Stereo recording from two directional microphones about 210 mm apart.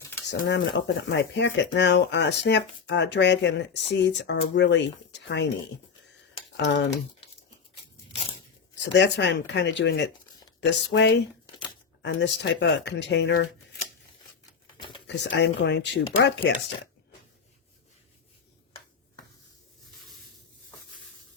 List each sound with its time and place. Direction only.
0.3 s speech: 55° left (ahead or behind)
6.6 s speech: 60° left (ahead or behind)
8.8 s speech: 55° left (ahead or behind)
15.0 s speech: 55° left (ahead or behind)